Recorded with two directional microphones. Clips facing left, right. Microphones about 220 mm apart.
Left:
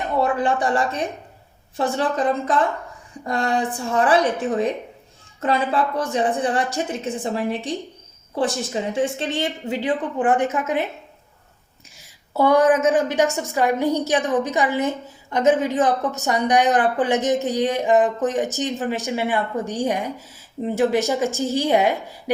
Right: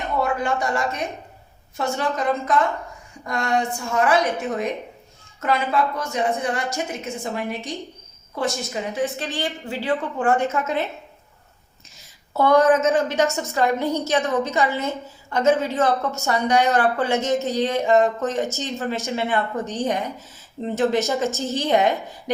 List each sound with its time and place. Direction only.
0.2 s a woman's voice: 30° left (ahead or behind); by 10.8 s 15° left (ahead or behind)
11.9 s a woman's voice: 15° left (ahead or behind)